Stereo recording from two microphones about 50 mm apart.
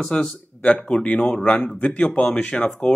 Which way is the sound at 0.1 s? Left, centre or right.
Centre.